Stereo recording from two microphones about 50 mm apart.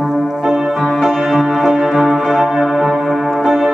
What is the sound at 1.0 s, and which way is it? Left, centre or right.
Music, centre.